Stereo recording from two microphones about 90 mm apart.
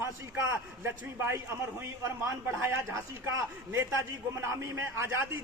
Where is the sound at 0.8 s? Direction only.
25° right (ahead or behind).